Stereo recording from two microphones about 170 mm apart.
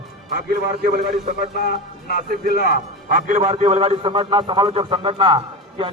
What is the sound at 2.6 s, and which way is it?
A man's voice, 60° right (ahead or behind).